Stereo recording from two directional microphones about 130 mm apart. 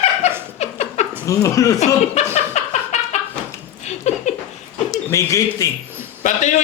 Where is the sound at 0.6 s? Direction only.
60° left (ahead or behind).